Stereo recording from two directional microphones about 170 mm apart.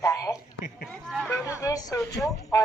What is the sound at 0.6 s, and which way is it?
Speech, 60° left (ahead or behind).